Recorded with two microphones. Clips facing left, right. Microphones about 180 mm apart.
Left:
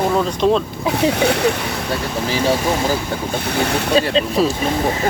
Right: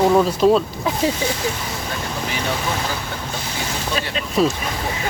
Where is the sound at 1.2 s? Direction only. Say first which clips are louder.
Left 7 dB; 65° left (ahead or behind).